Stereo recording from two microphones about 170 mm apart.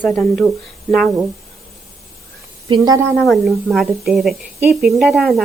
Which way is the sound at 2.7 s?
20° right (ahead or behind).